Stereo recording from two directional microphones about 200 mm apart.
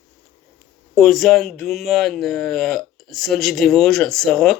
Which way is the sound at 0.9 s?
Centre (ahead or behind).